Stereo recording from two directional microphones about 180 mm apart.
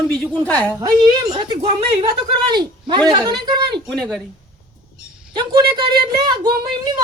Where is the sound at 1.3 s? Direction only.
30° right (ahead or behind).